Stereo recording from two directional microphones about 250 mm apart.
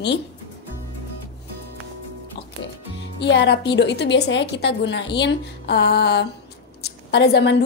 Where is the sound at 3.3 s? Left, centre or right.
Left.